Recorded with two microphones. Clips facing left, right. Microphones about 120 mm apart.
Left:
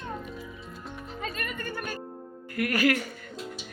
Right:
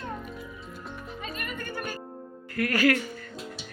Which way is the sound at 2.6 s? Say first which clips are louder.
Right 1 dB; 15° left (ahead or behind).